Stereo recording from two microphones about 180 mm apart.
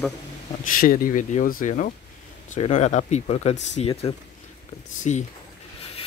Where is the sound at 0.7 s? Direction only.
50° left (ahead or behind).